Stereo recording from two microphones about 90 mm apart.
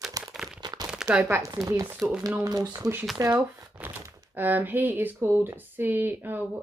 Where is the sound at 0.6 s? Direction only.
50° right (ahead or behind).